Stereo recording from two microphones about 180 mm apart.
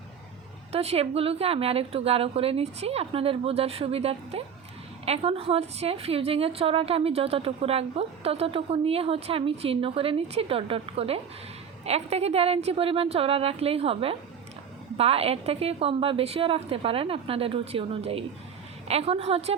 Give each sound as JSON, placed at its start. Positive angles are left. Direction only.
{"t": 0.7, "sound": "a woman's voice", "side_deg": -35}